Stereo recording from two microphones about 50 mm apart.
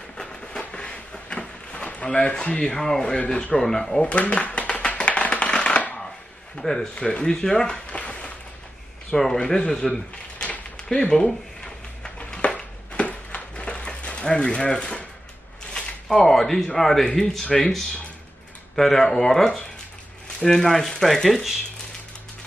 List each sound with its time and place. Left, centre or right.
0.2 s a sound: left
2.6 s speech: centre
4.0 s shuffling cards: left
6.5 s speech: centre
9.1 s speech: centre
10.4 s a sound: left
14.2 s speech: centre
18.8 s speech: centre